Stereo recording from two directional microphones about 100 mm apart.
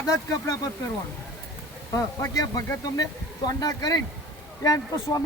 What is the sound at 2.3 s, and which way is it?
Speech, 40° left (ahead or behind).